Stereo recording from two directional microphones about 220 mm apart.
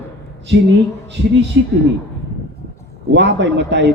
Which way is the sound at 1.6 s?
55° right (ahead or behind).